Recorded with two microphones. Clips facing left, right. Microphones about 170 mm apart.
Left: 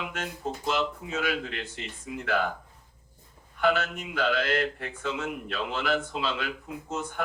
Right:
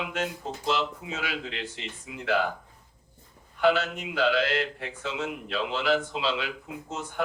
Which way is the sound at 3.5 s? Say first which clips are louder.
Right 2 dB; 50° left (ahead or behind).